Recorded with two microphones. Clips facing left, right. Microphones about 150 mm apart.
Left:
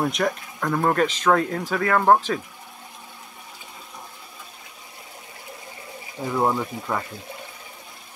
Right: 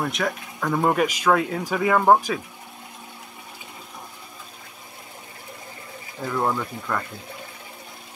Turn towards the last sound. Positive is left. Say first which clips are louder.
# left 1 dB
turn(degrees=10)  # may be behind; listen again after turning